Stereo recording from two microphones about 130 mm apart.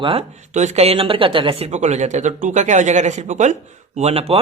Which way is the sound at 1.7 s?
65° right (ahead or behind).